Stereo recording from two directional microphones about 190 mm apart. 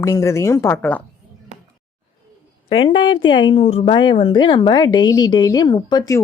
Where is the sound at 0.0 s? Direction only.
15° left (ahead or behind).